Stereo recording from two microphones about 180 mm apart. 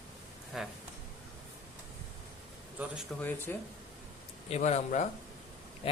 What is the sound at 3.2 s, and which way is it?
Speech, 10° left (ahead or behind).